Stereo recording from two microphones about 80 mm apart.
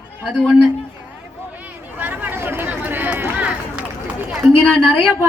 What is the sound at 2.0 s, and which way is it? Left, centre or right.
Run, right.